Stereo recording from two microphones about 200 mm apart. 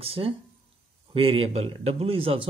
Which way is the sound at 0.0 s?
30° right (ahead or behind).